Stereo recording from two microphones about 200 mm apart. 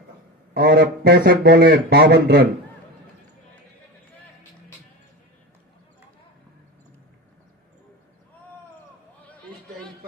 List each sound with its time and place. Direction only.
0.5 s speech: 50° right (ahead or behind)